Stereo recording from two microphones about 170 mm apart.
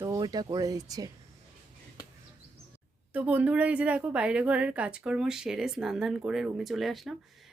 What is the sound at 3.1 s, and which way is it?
Speech, 10° right (ahead or behind).